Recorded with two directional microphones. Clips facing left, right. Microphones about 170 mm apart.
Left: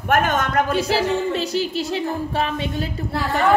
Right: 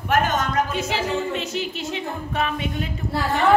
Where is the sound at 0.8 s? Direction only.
35° left (ahead or behind).